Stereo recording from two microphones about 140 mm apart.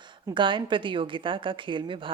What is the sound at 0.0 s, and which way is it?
A woman's voice, 35° right (ahead or behind).